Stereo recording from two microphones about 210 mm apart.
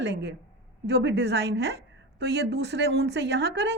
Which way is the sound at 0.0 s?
55° right (ahead or behind).